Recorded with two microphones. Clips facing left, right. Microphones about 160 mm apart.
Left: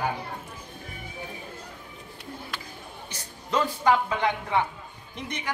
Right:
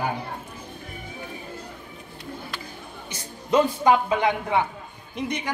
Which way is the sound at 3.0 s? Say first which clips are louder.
Right 8 dB; 15° right (ahead or behind).